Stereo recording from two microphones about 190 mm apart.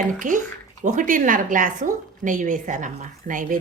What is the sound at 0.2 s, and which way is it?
A woman's voice, 40° right (ahead or behind).